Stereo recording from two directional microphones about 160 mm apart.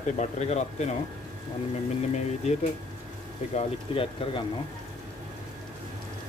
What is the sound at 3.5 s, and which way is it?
Speech, 40° left (ahead or behind).